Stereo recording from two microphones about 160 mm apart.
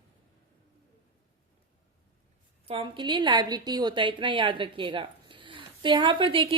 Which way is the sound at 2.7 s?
35° right (ahead or behind).